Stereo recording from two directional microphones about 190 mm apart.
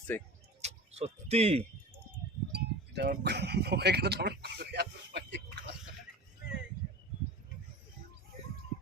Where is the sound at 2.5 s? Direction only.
60° right (ahead or behind).